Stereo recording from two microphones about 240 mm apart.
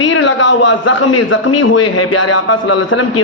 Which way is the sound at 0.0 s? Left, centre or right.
Left.